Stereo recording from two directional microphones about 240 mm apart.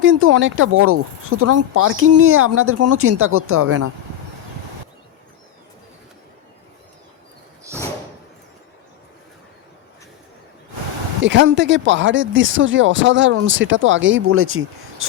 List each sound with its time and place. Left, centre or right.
0.0 s speech: right
11.2 s speech: right